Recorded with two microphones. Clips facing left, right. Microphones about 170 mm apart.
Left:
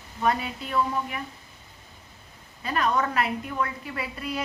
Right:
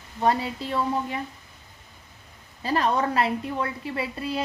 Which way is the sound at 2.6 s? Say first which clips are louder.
Right 2 dB; 30° right (ahead or behind).